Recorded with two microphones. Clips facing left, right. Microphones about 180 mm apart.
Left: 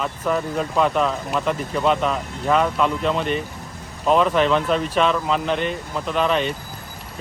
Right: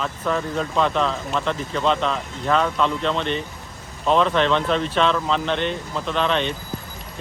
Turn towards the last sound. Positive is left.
turn(degrees=5)  # may be behind; listen again after turning